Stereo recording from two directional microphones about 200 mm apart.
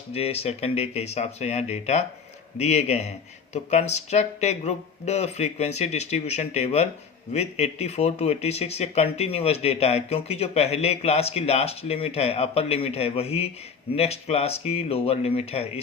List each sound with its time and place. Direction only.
0.1 s speech: 30° left (ahead or behind)